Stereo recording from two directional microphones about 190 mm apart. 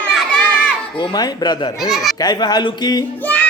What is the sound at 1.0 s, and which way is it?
Speech, 25° left (ahead or behind).